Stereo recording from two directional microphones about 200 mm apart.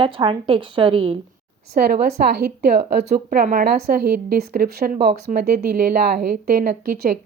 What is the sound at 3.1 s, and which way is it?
Speech, 45° right (ahead or behind).